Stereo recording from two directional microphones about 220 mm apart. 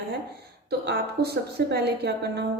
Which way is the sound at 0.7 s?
45° right (ahead or behind).